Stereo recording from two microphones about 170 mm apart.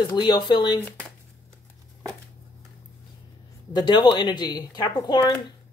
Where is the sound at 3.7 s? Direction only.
25° left (ahead or behind).